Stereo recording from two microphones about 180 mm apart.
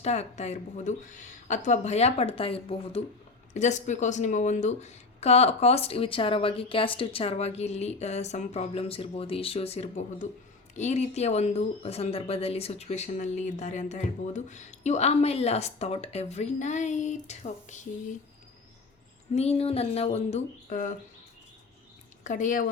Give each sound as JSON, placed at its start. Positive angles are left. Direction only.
{"t": 0.0, "sound": "speech", "side_deg": 40}
{"t": 19.3, "sound": "speech", "side_deg": 35}
{"t": 22.2, "sound": "speech", "side_deg": 45}